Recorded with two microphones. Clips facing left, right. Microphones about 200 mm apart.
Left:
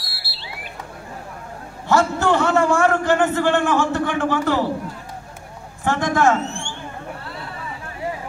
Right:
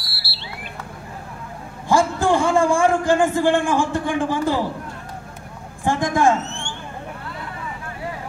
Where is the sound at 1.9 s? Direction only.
15° right (ahead or behind).